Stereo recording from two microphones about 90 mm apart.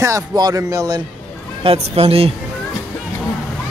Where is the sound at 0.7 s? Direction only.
35° right (ahead or behind).